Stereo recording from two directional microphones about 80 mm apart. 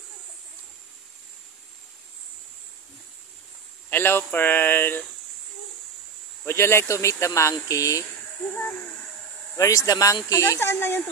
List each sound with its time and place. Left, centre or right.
3.9 s speech: left
6.4 s speech: left
9.6 s speech: left